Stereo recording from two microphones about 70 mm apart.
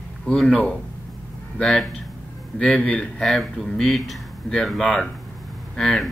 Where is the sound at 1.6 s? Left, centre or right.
Centre.